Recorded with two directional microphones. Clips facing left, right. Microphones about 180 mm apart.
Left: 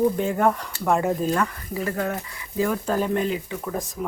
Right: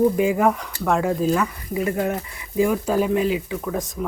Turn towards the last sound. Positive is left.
turn(degrees=0)  # may be behind; listen again after turning